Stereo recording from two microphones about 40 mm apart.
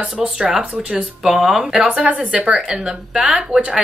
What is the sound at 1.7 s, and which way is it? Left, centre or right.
Speech, right.